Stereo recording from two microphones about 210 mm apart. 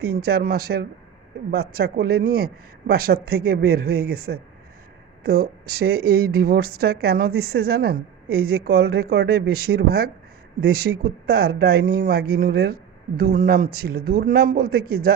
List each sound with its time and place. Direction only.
0.0 s speech: 50° right (ahead or behind)